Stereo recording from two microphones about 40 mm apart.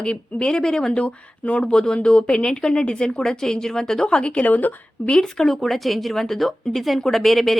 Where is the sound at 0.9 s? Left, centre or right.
Left.